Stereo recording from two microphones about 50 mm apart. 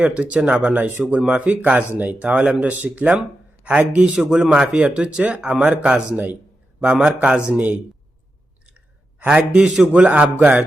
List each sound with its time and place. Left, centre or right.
0.0 s speech: right
4.1 s a man's voice: centre
5.9 s speech: right
6.7 s a man's voice: centre
7.5 s speech: right
8.6 s clicking: right
9.6 s a man's voice: centre
9.9 s speech: right
10.3 s speech: right